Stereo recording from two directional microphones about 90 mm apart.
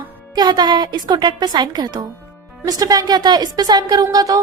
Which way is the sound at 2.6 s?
40° right (ahead or behind).